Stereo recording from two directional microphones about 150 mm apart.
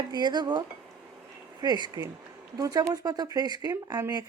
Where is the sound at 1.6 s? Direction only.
25° right (ahead or behind).